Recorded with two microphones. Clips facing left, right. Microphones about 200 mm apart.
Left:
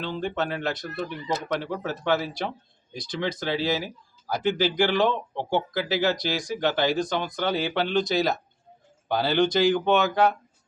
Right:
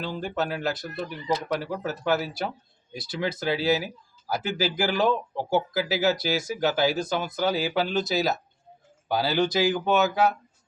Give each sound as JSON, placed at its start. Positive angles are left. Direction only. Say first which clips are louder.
{"t": 0.0, "sound": "speech", "louder": "left 1 dB", "side_deg": -5}